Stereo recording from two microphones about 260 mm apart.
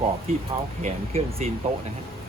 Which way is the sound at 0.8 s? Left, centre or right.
Right.